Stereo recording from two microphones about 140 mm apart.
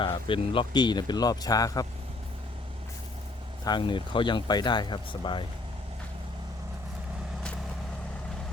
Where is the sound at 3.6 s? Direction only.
30° left (ahead or behind).